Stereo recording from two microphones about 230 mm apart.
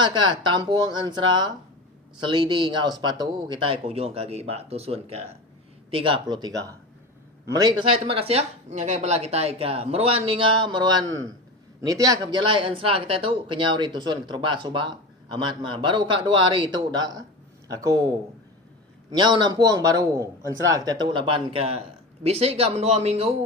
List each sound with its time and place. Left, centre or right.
0.0 s speech: centre
19.1 s speech: centre